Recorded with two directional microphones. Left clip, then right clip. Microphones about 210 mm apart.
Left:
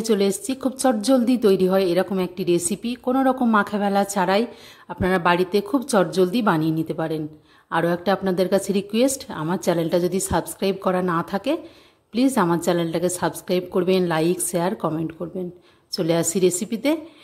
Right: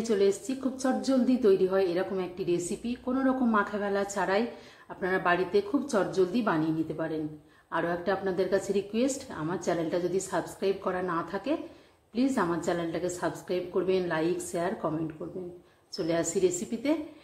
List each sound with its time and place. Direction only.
0.0 s a woman's voice: 50° left (ahead or behind)
15.9 s a woman's voice: 50° left (ahead or behind)